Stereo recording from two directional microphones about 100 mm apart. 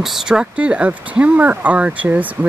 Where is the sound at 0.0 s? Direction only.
5° right (ahead or behind).